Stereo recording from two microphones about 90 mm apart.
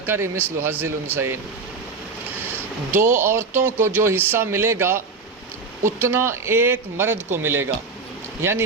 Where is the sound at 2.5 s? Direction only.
25° right (ahead or behind).